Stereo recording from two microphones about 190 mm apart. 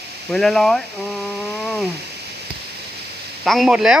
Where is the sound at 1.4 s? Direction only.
Centre (ahead or behind).